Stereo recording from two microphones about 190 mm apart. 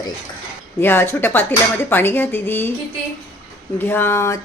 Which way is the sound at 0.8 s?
10° left (ahead or behind).